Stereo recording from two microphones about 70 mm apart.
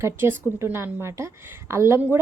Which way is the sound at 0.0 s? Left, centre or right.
Right.